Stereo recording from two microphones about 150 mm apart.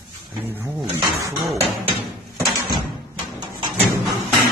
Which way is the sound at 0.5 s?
20° right (ahead or behind).